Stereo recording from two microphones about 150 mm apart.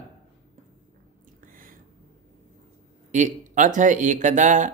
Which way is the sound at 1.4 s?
65° right (ahead or behind).